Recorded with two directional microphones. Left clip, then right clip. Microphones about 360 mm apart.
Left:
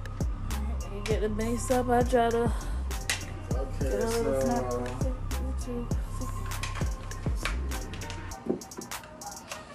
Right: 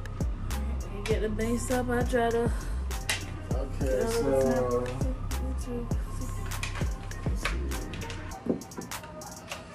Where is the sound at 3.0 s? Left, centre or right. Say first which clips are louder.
Right 1 dB; centre.